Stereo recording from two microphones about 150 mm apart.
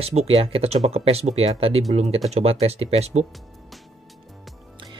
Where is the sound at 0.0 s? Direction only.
45° right (ahead or behind).